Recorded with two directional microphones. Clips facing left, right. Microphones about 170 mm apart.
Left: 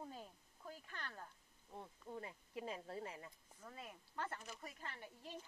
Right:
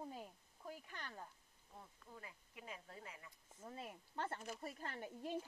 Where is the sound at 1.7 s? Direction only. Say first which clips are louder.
Left 8 dB; 30° left (ahead or behind).